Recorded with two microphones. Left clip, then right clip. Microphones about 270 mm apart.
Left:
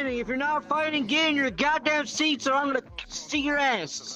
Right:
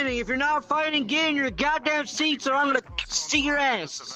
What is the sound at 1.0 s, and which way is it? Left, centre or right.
Speech, centre.